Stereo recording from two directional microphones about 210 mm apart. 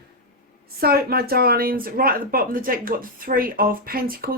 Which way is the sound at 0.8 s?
45° right (ahead or behind).